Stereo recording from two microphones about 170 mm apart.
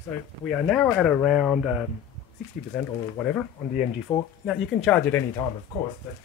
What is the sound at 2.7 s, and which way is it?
Speech, 5° left (ahead or behind).